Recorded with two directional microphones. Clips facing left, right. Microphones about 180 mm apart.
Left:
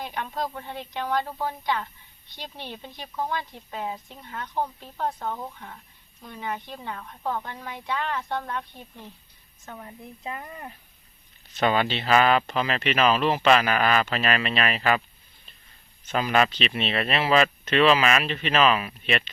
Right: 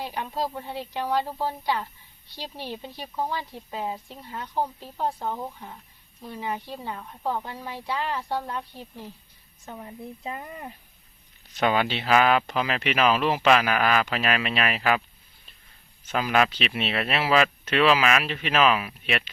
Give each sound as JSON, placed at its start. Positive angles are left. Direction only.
{"t": 0.0, "sound": "speech", "side_deg": -10}
{"t": 16.0, "sound": "speech", "side_deg": -5}